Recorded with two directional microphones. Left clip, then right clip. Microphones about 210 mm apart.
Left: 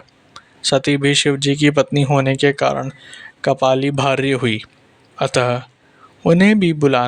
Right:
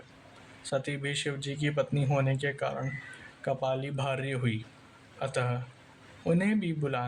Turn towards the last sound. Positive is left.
turn(degrees=45)  # may be behind; listen again after turning